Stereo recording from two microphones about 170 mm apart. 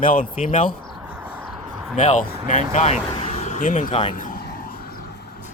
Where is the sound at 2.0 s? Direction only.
50° left (ahead or behind).